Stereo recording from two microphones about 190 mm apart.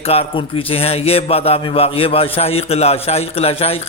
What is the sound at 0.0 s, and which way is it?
A man's voice, 30° left (ahead or behind).